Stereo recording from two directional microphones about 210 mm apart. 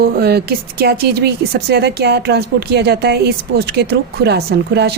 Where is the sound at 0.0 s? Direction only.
50° right (ahead or behind).